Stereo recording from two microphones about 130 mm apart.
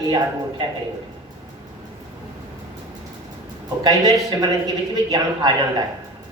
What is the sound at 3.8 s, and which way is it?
Speech, 30° right (ahead or behind).